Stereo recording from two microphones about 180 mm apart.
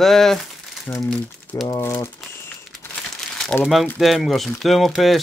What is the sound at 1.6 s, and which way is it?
Speech, 15° left (ahead or behind).